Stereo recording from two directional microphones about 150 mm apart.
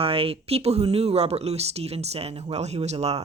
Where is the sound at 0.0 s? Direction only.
40° right (ahead or behind).